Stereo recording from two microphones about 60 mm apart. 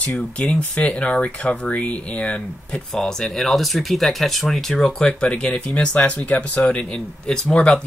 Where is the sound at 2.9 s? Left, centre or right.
Centre.